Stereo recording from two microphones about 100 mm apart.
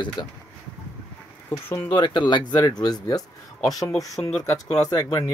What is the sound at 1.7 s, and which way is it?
Speech, 20° left (ahead or behind).